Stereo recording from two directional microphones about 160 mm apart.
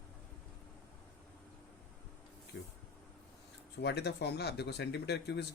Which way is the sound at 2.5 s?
90° left.